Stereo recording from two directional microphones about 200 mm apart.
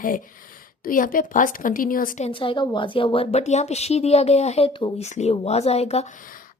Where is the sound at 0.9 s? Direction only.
45° left (ahead or behind).